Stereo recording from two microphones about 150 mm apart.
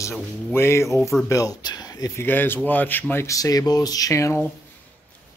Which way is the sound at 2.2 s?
15° left (ahead or behind).